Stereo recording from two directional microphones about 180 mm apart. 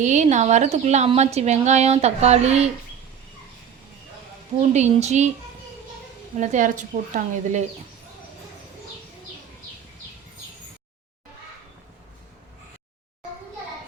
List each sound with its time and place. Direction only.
0.0 s a woman's voice: 40° right (ahead or behind)
4.7 s a woman's voice: 40° right (ahead or behind)
6.4 s a woman's voice: 45° right (ahead or behind)